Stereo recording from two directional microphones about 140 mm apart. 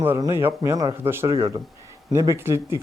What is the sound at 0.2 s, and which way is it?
Speech, 20° right (ahead or behind).